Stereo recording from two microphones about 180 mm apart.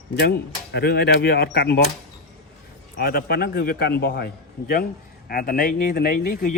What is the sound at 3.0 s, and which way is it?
A man's voice, 60° left (ahead or behind).